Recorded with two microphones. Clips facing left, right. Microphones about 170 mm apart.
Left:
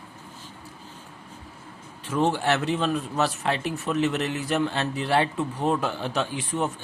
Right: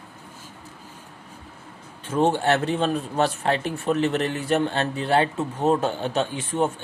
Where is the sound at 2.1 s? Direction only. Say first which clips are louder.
Right 3 dB; 30° right (ahead or behind).